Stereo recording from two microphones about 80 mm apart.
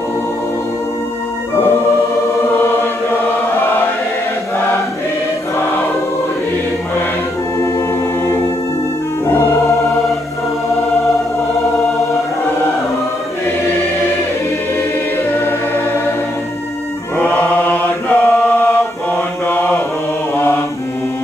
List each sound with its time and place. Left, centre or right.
17.2 s chant: centre
19.4 s mantra: left